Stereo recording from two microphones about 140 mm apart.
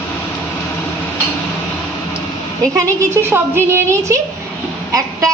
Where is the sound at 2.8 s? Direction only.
20° right (ahead or behind).